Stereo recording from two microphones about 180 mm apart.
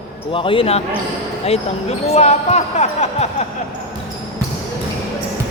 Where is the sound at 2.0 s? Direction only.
35° left (ahead or behind).